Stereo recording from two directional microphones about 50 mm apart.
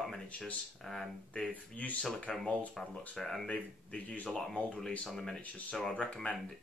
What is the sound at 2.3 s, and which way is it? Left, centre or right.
Speech, centre.